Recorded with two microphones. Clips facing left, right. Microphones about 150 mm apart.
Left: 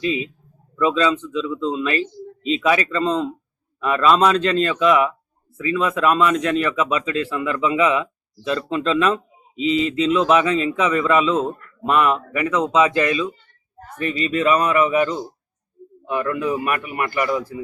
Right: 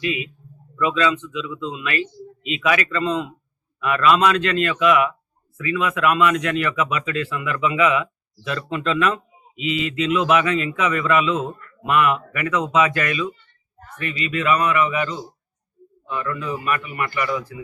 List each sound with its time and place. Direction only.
0.0 s a man's voice: 35° left (ahead or behind)
13.7 s a man's voice: 40° left (ahead or behind)